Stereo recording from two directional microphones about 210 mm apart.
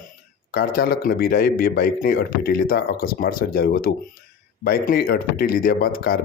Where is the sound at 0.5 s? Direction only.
45° left (ahead or behind).